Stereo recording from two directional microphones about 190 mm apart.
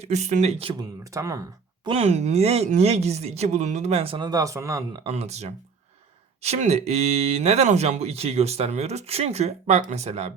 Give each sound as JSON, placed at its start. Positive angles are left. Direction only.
{"t": 0.0, "sound": "speech", "side_deg": -35}
{"t": 1.1, "sound": "speech", "side_deg": -15}
{"t": 1.9, "sound": "speech", "side_deg": -35}
{"t": 5.0, "sound": "speech", "side_deg": -35}